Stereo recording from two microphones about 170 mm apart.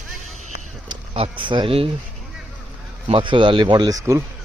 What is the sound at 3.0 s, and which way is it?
Speech, 30° right (ahead or behind).